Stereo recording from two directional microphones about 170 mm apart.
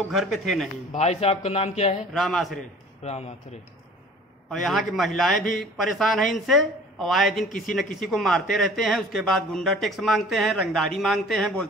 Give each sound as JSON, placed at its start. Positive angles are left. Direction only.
{"t": 0.1, "sound": "speech", "side_deg": 0}
{"t": 0.9, "sound": "a man's voice", "side_deg": 40}
{"t": 2.0, "sound": "speech", "side_deg": 0}
{"t": 3.0, "sound": "a man's voice", "side_deg": 40}
{"t": 4.5, "sound": "speech", "side_deg": 0}